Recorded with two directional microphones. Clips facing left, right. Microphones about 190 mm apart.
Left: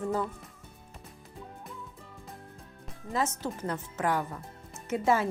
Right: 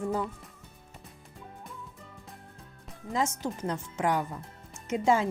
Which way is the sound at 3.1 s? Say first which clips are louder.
Right 1 dB; 15° right (ahead or behind).